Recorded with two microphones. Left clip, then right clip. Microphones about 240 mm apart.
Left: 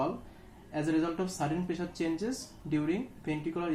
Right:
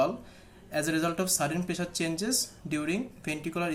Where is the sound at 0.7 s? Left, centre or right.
Right.